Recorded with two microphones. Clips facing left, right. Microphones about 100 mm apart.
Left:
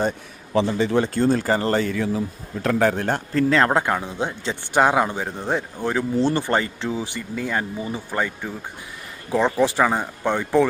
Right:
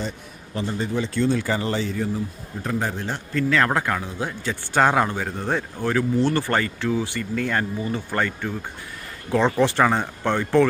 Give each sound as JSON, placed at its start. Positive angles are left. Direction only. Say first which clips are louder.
{"t": 0.5, "sound": "speech", "louder": "left 6 dB", "side_deg": 90}
{"t": 1.0, "sound": "speech", "louder": "left 3 dB", "side_deg": 45}
{"t": 1.9, "sound": "speech", "louder": "left 2 dB", "side_deg": 90}
{"t": 3.3, "sound": "a man's voice", "louder": "left 2 dB", "side_deg": 30}